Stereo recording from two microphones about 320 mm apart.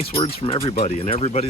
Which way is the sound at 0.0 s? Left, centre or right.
Centre.